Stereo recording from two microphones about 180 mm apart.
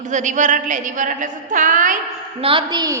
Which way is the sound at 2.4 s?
30° right (ahead or behind).